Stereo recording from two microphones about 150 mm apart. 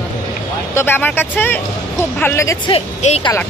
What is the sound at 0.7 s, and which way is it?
Speech, 15° left (ahead or behind).